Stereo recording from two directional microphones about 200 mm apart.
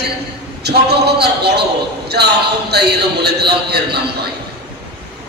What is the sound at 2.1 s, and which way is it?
Speech, 55° right (ahead or behind).